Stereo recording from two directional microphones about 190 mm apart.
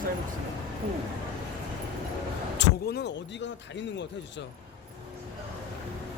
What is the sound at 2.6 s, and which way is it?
Vehicle, 70° left (ahead or behind).